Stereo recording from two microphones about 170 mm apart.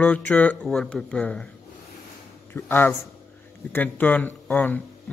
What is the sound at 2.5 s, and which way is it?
Speech, 10° left (ahead or behind).